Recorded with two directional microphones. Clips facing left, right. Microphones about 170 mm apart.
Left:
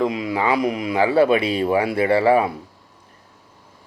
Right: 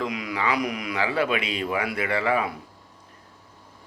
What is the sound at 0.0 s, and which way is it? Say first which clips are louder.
Speech: left 7 dB; 25° left (ahead or behind).